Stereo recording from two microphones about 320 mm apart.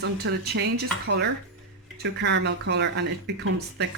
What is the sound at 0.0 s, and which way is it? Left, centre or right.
Speech, right.